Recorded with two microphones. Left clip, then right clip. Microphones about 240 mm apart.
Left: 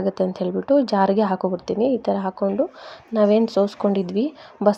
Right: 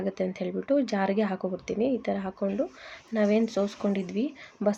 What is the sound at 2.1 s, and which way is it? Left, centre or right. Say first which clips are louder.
Speech: left 8 dB; centre.